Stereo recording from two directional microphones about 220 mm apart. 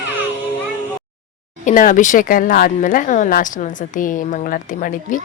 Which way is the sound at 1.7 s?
35° left (ahead or behind).